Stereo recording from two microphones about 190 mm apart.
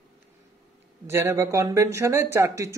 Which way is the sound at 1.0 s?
10° right (ahead or behind).